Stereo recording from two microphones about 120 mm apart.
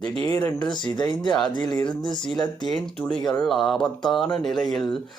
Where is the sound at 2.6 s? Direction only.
5° left (ahead or behind).